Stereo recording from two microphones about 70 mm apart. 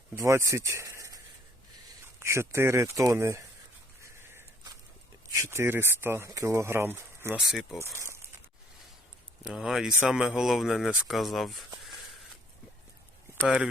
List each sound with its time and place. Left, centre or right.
0.2 s speech: right
2.1 s speech: right
4.0 s a sound: right
5.5 s speech: right
6.2 s speech: right
7.3 s speech: centre
7.8 s speech: left
8.0 s a sound: right
9.5 s speech: centre